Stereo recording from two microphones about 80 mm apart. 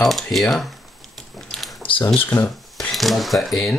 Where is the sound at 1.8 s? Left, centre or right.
Left.